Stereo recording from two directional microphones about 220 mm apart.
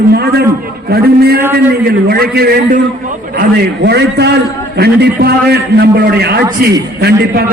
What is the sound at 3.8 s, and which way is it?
A man's voice, 50° right (ahead or behind).